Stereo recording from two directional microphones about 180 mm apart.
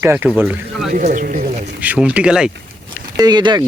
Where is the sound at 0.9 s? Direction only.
45° right (ahead or behind).